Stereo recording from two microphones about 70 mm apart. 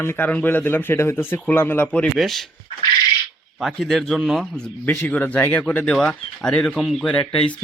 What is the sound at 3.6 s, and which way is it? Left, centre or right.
Speech, centre.